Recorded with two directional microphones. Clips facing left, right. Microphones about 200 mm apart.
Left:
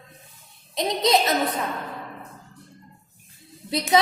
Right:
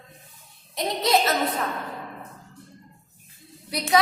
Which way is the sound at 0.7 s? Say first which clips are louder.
Left 2 dB; 20° left (ahead or behind).